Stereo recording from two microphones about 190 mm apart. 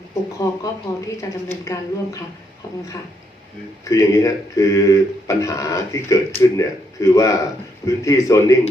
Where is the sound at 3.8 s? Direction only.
15° left (ahead or behind).